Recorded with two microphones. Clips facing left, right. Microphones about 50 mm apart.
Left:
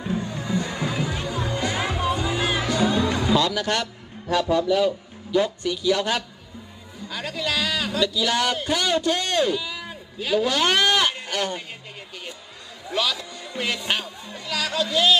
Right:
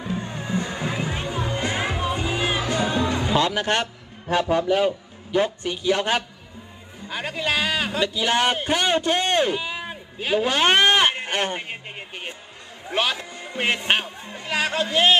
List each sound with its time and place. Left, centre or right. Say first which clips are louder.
0.0 s music: left 1 dB; right
4.3 s a man's voice: even; right